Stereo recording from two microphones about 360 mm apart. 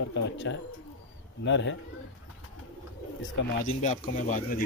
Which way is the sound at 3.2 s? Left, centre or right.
Left.